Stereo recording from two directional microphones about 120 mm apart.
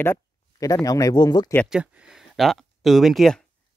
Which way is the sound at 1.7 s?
5° right (ahead or behind).